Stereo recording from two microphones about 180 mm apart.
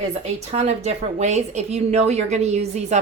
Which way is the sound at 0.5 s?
40° right (ahead or behind).